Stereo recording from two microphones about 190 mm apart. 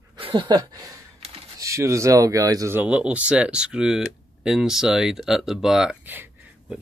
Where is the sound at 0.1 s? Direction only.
25° right (ahead or behind).